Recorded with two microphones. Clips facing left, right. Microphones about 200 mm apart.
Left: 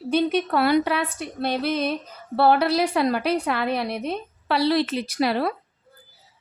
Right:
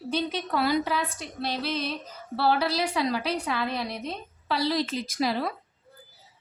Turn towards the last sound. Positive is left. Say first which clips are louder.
# left 5 dB
turn(degrees=65)  # may be behind; listen again after turning